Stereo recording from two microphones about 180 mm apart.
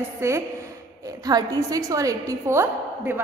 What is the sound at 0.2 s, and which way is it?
A woman's voice, 15° right (ahead or behind).